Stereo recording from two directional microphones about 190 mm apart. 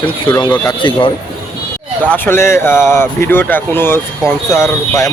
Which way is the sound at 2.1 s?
15° left (ahead or behind).